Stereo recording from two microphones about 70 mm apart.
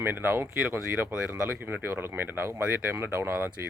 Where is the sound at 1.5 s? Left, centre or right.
Right.